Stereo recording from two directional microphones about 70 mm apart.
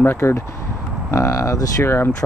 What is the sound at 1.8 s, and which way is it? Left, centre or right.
Speech, left.